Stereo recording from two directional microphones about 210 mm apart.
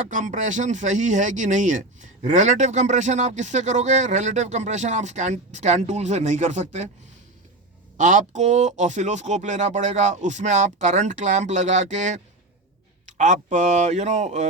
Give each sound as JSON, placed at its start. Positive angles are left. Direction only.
{"t": 0.1, "sound": "speech", "side_deg": -35}
{"t": 7.9, "sound": "speech", "side_deg": -35}